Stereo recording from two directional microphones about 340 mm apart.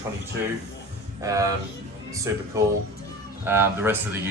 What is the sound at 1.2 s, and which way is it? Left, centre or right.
Speech, centre.